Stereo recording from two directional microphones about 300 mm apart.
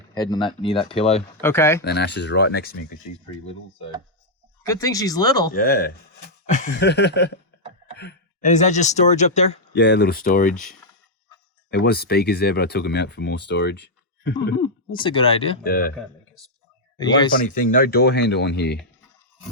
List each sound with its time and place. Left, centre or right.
0.1 s speech: centre
1.4 s speech: centre
1.8 s speech: left
4.7 s speech: centre
5.5 s speech: left
9.7 s speech: left
11.7 s speech: left
14.6 s speech: centre
15.6 s speech: left
17.0 s speech: centre
17.4 s speech: left